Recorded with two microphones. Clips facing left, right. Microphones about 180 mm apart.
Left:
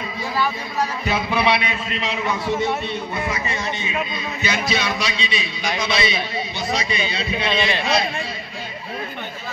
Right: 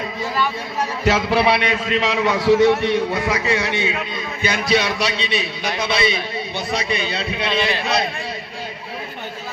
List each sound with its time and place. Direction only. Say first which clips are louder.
1.0 s a man's voice: right 5 dB; 80° right; by 7.5 s 65° right (ahead or behind)